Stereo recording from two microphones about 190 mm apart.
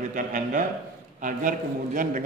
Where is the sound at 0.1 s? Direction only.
45° right (ahead or behind).